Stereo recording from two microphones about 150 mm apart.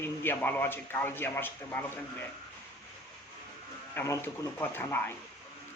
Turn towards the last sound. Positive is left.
turn(degrees=15)  # may be behind; listen again after turning